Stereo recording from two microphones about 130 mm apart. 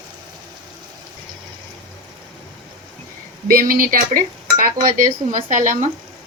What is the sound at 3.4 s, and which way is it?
Dishes, 90° right.